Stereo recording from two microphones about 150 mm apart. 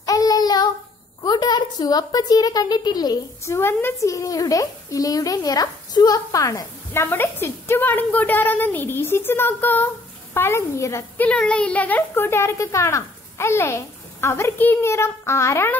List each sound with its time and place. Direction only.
0.0 s child singing: 25° left (ahead or behind)
1.2 s a woman's voice: 30° left (ahead or behind)
11.2 s speech: 5° left (ahead or behind)